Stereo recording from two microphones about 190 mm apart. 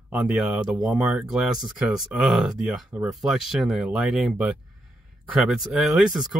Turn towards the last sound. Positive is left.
turn(degrees=-5)  # may be behind; listen again after turning